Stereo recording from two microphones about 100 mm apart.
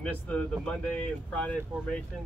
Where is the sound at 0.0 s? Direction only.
10° left (ahead or behind).